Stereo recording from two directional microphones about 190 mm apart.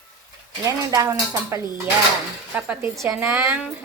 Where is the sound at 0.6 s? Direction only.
15° right (ahead or behind).